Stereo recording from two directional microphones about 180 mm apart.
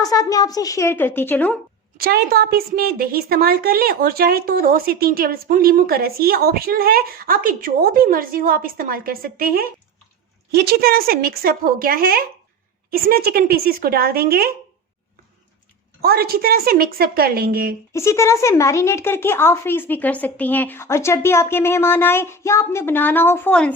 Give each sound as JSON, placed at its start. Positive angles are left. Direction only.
{"t": 0.0, "sound": "speech", "side_deg": 20}
{"t": 2.0, "sound": "a woman's voice", "side_deg": -60}
{"t": 16.0, "sound": "a woman's voice", "side_deg": -60}
{"t": 17.9, "sound": "speech", "side_deg": 15}